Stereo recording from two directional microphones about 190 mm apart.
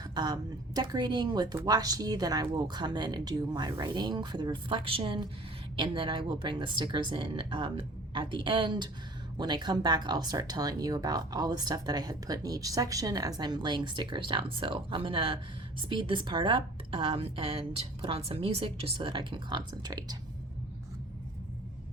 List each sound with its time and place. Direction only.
0.0 s speech: 20° right (ahead or behind)